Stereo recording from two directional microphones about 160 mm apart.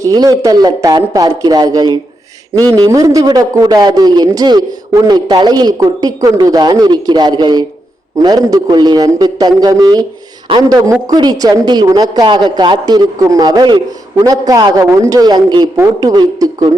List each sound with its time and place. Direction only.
0.0 s a man's voice: 20° right (ahead or behind)